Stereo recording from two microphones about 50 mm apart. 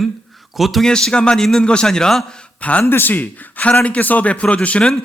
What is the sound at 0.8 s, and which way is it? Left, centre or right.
A man's voice, centre.